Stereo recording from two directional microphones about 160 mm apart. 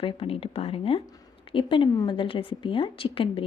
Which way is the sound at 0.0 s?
35° left (ahead or behind).